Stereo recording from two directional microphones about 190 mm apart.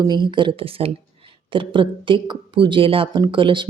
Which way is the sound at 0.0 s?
25° right (ahead or behind).